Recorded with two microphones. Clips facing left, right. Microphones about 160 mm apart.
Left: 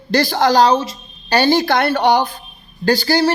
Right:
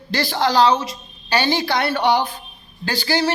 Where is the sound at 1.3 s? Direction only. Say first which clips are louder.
Left 5 dB; 45° left (ahead or behind).